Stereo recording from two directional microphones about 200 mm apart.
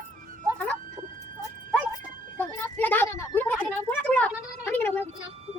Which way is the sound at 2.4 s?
10° left (ahead or behind).